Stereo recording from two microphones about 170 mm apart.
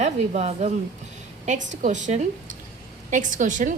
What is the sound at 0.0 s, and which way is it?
A woman's voice, 40° right (ahead or behind).